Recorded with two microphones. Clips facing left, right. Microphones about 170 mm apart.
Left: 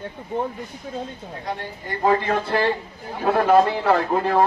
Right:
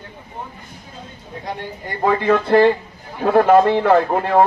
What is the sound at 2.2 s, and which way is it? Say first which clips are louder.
Speech: right 8 dB; 55° right (ahead or behind).